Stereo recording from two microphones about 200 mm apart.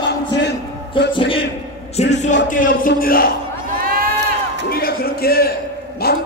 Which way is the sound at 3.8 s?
45° right (ahead or behind).